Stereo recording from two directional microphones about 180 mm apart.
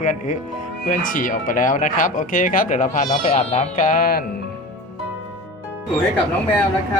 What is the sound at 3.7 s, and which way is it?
Speech, 50° left (ahead or behind).